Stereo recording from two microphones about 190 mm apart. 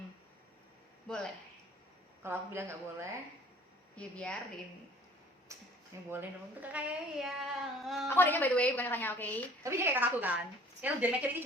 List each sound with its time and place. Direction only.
1.0 s speech: 5° left (ahead or behind)
2.2 s a woman's voice: 10° right (ahead or behind)
3.9 s speech: 5° left (ahead or behind)
5.5 s speech: 15° right (ahead or behind)
8.0 s a woman's voice: 10° left (ahead or behind)
9.6 s a woman's voice: 15° right (ahead or behind)